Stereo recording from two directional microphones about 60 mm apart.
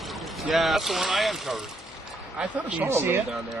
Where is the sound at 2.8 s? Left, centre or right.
Right.